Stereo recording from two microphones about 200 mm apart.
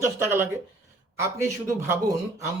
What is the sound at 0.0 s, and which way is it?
Speech, 10° right (ahead or behind).